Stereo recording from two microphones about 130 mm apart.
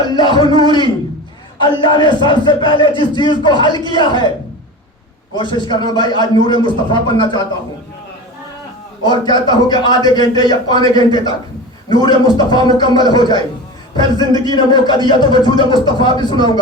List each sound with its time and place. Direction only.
0.0 s a man's voice: 35° left (ahead or behind)
5.3 s a man's voice: 35° left (ahead or behind)
9.0 s a man's voice: 35° left (ahead or behind)